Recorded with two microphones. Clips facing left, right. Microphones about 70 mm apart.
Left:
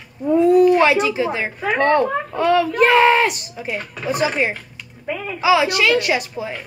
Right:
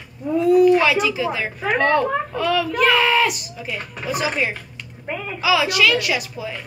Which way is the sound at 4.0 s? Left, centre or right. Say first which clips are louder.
Left 3 dB; left.